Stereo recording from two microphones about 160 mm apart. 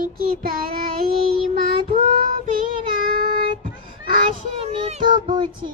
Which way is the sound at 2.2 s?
60° right (ahead or behind).